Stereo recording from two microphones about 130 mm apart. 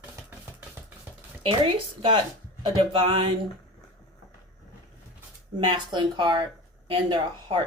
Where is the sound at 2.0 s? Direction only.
40° right (ahead or behind).